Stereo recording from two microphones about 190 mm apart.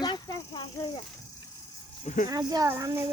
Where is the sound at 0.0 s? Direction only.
25° left (ahead or behind).